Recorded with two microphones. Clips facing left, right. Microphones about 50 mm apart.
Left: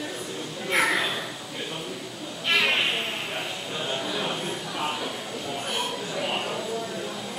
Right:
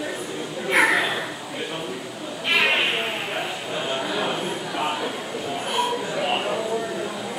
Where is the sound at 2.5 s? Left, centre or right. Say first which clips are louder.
Right 3 dB; right.